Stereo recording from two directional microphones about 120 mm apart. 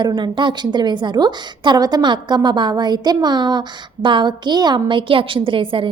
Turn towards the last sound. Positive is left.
turn(degrees=-45)  # may be behind; listen again after turning